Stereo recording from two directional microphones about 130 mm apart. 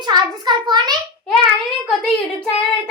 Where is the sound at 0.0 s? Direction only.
35° right (ahead or behind).